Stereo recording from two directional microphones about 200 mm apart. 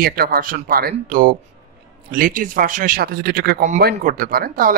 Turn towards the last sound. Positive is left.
turn(degrees=-45)  # may be behind; listen again after turning